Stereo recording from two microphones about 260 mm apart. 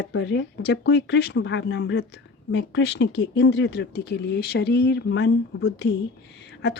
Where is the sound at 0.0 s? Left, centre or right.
Left.